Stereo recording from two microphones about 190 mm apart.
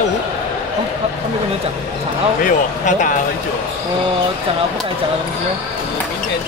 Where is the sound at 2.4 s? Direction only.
40° left (ahead or behind).